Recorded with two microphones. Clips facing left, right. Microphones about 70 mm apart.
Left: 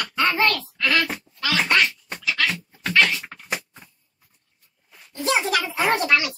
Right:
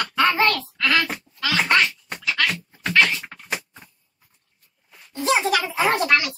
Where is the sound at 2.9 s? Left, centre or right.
Centre.